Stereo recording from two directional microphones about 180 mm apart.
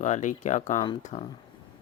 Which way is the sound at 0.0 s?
40° left (ahead or behind).